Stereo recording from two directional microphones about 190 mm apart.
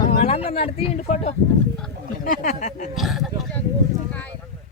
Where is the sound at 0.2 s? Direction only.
30° left (ahead or behind).